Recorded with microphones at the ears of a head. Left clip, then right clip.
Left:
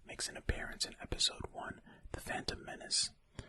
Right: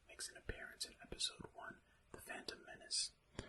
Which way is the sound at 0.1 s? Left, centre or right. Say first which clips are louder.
Left 9 dB; left.